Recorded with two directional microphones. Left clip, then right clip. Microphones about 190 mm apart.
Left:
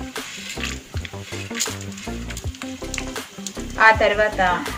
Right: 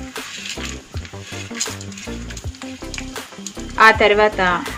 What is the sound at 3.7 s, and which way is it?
Speech, 50° right (ahead or behind).